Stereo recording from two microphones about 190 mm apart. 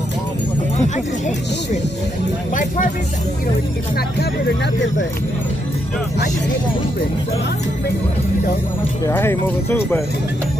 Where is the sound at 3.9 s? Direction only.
65° left (ahead or behind).